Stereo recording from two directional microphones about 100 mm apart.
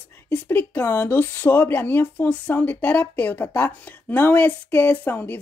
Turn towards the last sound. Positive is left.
turn(degrees=15)  # may be behind; listen again after turning